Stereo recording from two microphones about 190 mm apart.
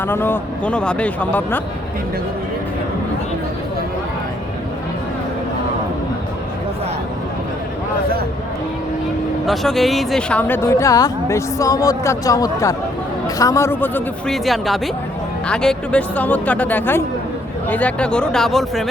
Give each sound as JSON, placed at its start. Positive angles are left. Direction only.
{"t": 0.0, "sound": "speech", "side_deg": 10}
{"t": 9.5, "sound": "speech", "side_deg": 0}